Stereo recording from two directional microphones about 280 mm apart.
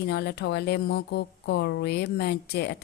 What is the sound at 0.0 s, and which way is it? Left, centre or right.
A woman's voice, left.